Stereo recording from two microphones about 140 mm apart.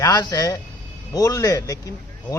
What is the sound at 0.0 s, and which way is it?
A man's voice, 25° left (ahead or behind).